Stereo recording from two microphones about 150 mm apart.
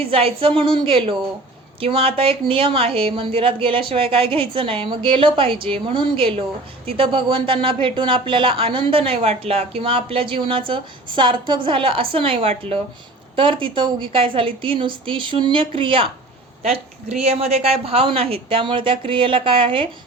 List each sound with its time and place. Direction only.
0.0 s speech: 40° right (ahead or behind)